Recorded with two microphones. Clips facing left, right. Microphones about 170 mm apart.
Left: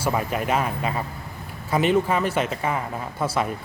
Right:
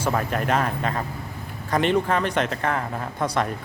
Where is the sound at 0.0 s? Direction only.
10° left (ahead or behind).